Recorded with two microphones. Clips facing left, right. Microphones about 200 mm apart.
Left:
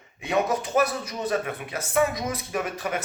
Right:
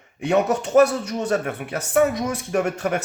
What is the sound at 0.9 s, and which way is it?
Speech, 75° right (ahead or behind).